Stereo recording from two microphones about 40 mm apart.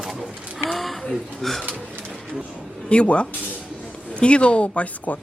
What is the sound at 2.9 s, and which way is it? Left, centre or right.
Speech, left.